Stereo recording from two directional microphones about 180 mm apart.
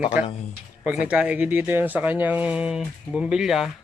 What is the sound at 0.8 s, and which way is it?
Speech, 5° right (ahead or behind).